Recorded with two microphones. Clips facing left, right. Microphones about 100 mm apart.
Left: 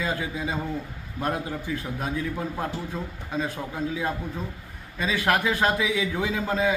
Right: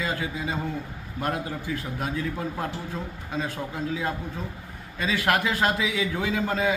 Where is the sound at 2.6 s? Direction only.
25° left (ahead or behind).